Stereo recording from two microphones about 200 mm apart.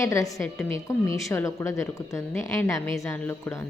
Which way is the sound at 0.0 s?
15° left (ahead or behind).